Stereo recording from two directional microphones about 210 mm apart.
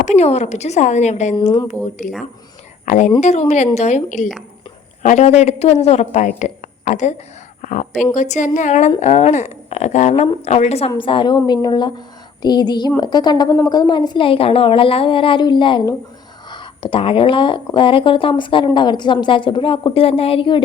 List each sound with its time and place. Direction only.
0.0 s a woman's voice: 30° left (ahead or behind)